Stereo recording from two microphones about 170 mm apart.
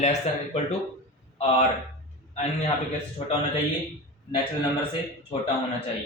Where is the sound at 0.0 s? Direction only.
45° left (ahead or behind).